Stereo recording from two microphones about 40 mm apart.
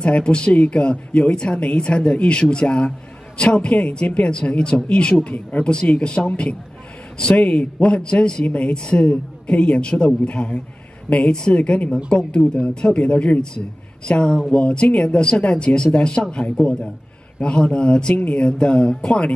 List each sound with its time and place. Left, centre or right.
0.0 s speech: left
7.4 s speech: left
8.5 s a woman's voice: left
8.7 s a woman's voice: left
18.1 s a woman's voice: left
18.5 s speech: left